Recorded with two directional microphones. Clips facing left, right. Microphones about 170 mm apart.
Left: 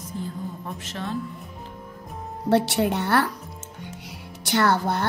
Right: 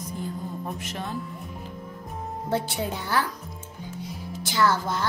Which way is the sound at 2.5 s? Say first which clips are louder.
Left 7 dB; 75° left (ahead or behind).